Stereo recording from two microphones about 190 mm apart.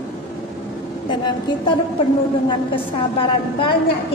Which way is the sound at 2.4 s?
25° left (ahead or behind).